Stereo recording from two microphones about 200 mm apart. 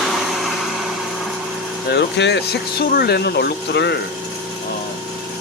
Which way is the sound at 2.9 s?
50° left (ahead or behind).